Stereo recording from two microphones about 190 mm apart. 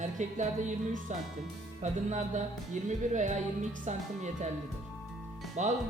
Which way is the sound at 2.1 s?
40° right (ahead or behind).